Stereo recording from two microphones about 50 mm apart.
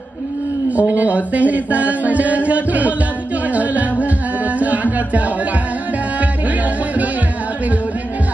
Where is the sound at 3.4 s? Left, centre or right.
Right.